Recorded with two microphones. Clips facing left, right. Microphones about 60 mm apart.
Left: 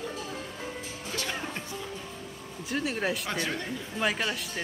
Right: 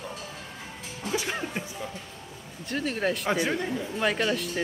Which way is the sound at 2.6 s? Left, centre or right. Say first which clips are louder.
Right 2 dB; centre.